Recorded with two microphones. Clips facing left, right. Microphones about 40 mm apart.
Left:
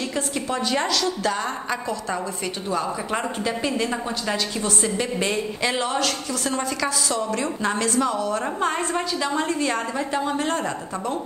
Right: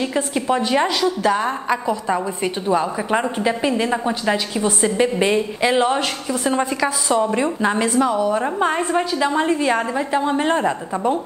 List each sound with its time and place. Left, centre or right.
0.1 s a woman's voice: centre